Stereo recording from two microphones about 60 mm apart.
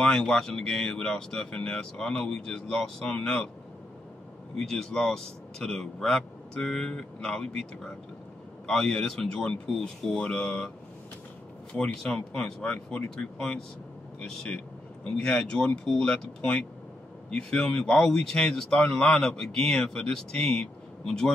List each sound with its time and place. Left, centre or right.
0.1 s speech: centre
4.6 s speech: centre
11.7 s speech: centre